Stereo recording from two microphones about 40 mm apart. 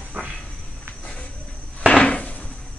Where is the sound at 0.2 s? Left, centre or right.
Right.